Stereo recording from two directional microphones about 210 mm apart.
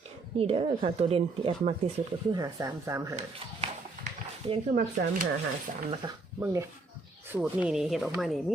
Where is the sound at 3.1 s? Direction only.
30° right (ahead or behind).